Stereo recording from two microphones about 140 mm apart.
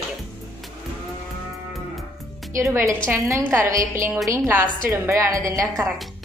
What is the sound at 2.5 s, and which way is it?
A woman's voice, 20° right (ahead or behind).